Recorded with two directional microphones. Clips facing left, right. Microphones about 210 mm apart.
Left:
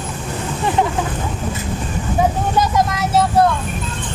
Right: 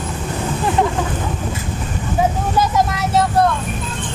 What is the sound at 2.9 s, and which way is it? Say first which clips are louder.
Vehicle: left 1 dB; centre (ahead or behind).